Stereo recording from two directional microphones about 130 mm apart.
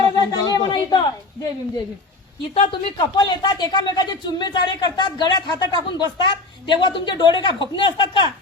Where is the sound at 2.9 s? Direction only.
35° left (ahead or behind).